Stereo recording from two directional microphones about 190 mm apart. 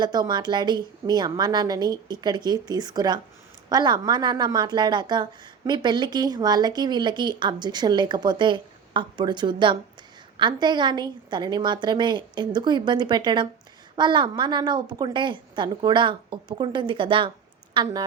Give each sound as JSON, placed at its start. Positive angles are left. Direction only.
{"t": 0.0, "sound": "a woman's voice", "side_deg": -20}